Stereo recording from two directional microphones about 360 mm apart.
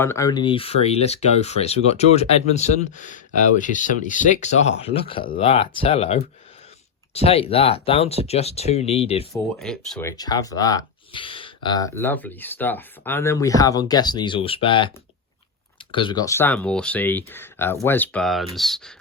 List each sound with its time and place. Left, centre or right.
0.0 s speech: centre
7.3 s speech: centre
9.3 s speech: centre